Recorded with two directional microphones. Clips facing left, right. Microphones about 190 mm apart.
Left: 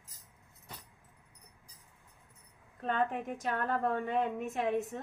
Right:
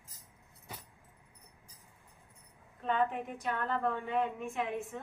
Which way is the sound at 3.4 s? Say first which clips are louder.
Left 1 dB; 45° left (ahead or behind).